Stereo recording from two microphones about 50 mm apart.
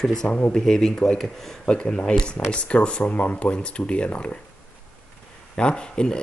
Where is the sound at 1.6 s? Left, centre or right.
Left.